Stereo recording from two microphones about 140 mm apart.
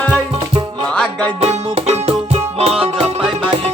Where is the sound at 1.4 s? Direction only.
45° right (ahead or behind).